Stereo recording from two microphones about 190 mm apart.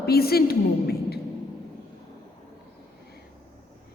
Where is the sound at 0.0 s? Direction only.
55° left (ahead or behind).